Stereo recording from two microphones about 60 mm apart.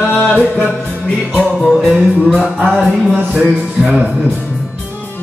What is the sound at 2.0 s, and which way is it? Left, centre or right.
Music, centre.